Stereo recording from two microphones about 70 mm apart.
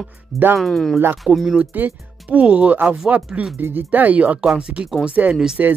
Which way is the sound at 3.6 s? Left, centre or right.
Right.